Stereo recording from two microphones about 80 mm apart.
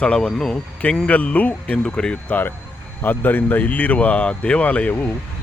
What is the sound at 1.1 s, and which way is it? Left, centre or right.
A man's voice, centre.